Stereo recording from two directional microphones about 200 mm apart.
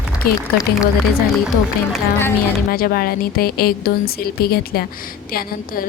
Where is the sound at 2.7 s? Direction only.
45° left (ahead or behind).